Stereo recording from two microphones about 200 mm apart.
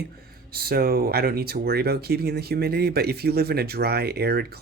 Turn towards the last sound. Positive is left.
turn(degrees=-50)  # may be behind; listen again after turning